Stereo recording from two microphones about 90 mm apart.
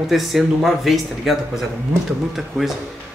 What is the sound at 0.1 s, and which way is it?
Speech, centre (ahead or behind).